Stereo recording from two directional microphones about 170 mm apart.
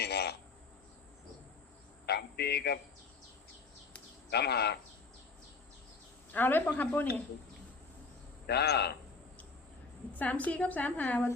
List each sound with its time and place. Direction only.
0.0 s a sound: 70° left (ahead or behind)
2.0 s a sound: 70° left (ahead or behind)
4.3 s speech: 75° left (ahead or behind)
6.3 s a woman's voice: 10° left (ahead or behind)
8.4 s speech: 70° left (ahead or behind)
10.2 s a woman's voice: 10° left (ahead or behind)